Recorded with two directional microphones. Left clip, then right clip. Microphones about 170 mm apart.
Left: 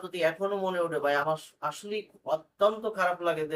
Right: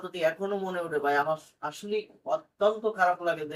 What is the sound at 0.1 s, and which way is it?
Speech, 20° left (ahead or behind).